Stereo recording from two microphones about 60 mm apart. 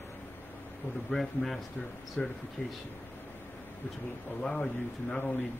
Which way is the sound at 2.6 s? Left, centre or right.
Left.